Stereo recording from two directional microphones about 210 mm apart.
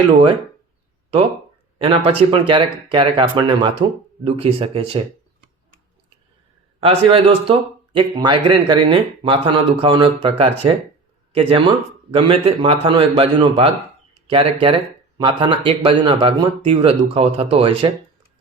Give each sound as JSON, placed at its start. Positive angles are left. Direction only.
{"t": 0.1, "sound": "speech", "side_deg": -20}
{"t": 1.8, "sound": "speech", "side_deg": -25}
{"t": 6.7, "sound": "speech", "side_deg": -25}